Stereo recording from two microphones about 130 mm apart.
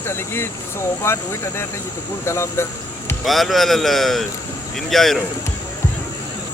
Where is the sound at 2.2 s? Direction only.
20° left (ahead or behind).